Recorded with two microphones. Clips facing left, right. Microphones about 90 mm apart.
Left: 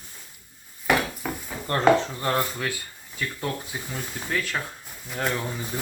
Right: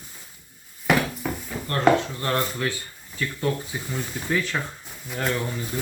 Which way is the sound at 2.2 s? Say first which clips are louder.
Even; 5° left (ahead or behind).